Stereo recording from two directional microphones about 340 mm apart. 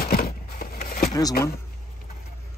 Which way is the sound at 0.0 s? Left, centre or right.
Left.